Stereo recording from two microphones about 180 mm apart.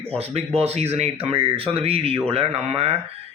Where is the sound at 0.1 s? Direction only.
35° right (ahead or behind).